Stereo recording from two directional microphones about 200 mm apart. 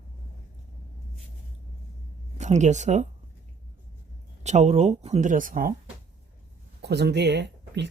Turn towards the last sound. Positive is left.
turn(degrees=-60)  # may be behind; listen again after turning